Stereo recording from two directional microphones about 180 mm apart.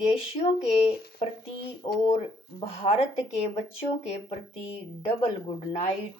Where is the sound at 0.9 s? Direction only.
60° left (ahead or behind).